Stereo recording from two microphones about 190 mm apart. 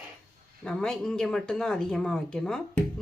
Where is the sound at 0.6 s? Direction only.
5° left (ahead or behind).